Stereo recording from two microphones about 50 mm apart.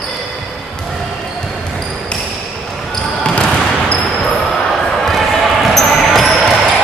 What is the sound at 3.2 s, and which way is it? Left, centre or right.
Basketball bounce, left.